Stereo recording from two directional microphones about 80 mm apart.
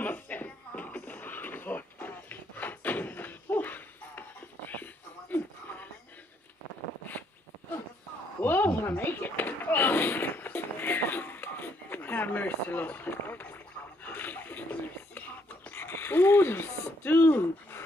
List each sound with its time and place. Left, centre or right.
0.0 s music: left
5.3 s music: left
8.4 s a sound: left